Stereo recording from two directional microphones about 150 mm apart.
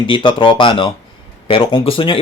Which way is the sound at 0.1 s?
35° left (ahead or behind).